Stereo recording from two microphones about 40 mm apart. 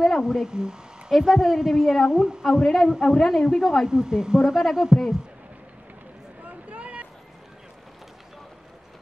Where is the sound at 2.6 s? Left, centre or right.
Centre.